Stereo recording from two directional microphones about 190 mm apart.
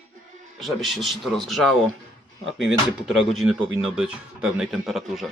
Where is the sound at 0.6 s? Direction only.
Centre (ahead or behind).